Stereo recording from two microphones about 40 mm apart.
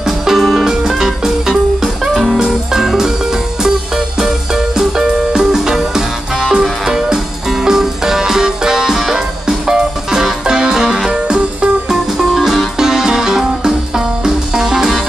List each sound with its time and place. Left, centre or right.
0.0 s music: centre
11.9 s music: centre